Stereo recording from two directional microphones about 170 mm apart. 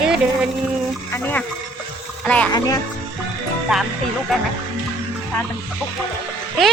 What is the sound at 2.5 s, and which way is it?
Speech, 20° left (ahead or behind).